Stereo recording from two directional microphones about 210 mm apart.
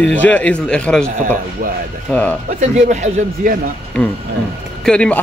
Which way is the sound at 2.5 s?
40° right (ahead or behind).